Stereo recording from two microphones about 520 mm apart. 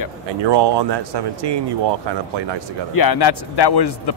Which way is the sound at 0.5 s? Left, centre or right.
Right.